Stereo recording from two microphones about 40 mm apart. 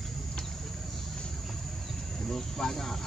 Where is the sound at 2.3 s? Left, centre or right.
Centre.